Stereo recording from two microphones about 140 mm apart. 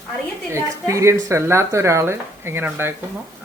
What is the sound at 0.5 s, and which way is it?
Speech, 20° right (ahead or behind).